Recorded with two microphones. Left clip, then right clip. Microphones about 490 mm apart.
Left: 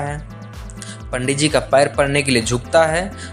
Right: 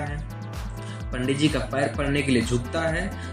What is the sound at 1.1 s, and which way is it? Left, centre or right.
Speech, left.